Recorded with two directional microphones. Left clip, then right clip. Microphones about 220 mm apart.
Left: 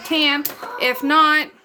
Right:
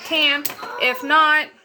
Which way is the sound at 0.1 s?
55° left (ahead or behind).